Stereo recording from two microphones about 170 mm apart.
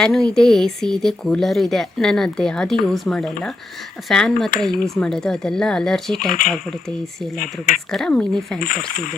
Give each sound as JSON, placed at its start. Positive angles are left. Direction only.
{"t": 0.0, "sound": "speech", "side_deg": 5}
{"t": 7.3, "sound": "speech", "side_deg": 50}
{"t": 7.9, "sound": "speech", "side_deg": 5}